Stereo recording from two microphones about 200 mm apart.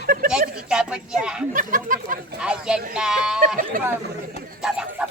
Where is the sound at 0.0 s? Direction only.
45° right (ahead or behind).